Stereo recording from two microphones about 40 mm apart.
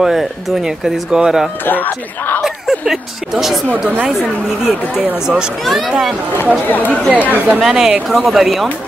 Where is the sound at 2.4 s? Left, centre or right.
Centre.